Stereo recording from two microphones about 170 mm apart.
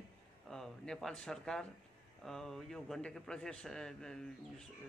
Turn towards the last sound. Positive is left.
turn(degrees=5)  # may be behind; listen again after turning